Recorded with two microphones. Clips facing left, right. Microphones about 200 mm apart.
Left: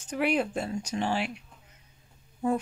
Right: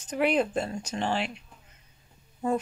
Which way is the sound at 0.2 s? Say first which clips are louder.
Right 2 dB; 10° left (ahead or behind).